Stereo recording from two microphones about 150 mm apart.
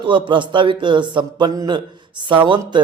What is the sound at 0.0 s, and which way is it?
A man's voice, 35° right (ahead or behind).